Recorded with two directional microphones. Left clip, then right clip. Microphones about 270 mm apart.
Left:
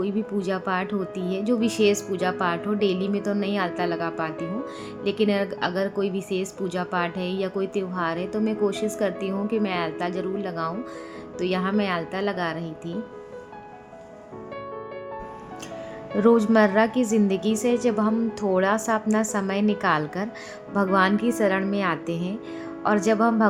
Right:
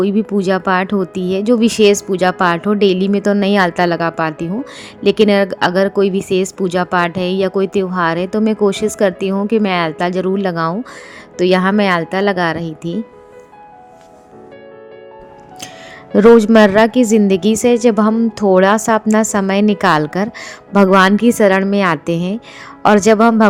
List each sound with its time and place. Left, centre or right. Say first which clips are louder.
0.0 s speech: right 11 dB; right
16.1 s speech: right 11 dB; right